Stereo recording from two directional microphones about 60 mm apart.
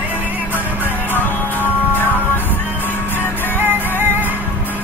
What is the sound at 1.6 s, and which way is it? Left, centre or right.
Music, left.